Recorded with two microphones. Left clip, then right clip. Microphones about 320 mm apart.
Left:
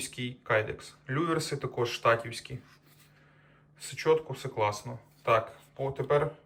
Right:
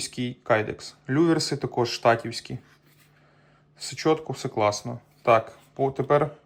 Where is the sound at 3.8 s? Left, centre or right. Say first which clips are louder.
Right 3 dB; centre.